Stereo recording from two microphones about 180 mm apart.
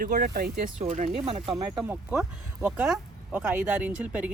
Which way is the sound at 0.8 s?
40° right (ahead or behind).